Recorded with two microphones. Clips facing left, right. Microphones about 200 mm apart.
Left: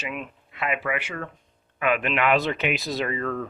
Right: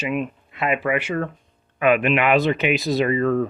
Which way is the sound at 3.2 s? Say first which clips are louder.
Right 9 dB; 30° right (ahead or behind).